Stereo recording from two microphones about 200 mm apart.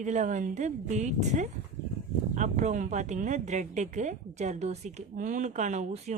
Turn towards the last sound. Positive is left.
turn(degrees=-35)  # may be behind; listen again after turning